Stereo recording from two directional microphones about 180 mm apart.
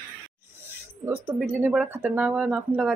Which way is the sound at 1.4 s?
10° right (ahead or behind).